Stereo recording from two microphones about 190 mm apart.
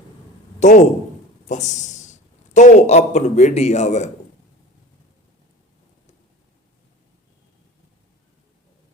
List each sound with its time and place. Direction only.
0.6 s a man's voice: 40° left (ahead or behind)